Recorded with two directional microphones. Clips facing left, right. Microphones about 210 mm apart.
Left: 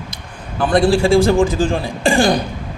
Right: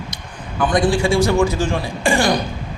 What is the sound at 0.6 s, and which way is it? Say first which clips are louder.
Speech: left 3 dB; 35° left (ahead or behind).